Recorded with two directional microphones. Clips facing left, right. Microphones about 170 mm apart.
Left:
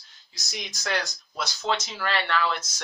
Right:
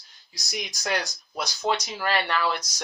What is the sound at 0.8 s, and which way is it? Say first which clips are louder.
Speech: even; 15° right (ahead or behind).